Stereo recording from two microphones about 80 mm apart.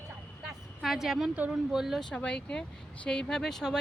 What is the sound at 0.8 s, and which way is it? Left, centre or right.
Speech, centre.